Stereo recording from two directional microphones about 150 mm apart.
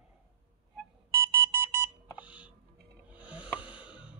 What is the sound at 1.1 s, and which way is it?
Alarm clock, 15° right (ahead or behind).